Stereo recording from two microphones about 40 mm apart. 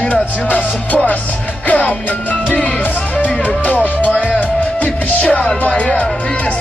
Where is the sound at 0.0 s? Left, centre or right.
Left.